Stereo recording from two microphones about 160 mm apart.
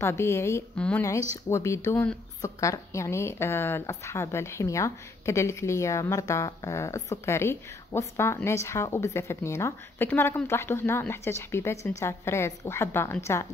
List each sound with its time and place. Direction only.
0.0 s a woman's voice: 15° left (ahead or behind)